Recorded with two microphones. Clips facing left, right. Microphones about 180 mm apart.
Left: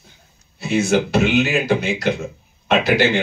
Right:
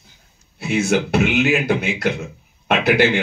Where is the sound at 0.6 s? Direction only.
55° right (ahead or behind).